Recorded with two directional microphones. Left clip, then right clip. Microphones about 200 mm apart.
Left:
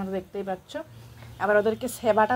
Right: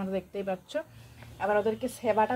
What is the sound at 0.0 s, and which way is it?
Speech, centre (ahead or behind).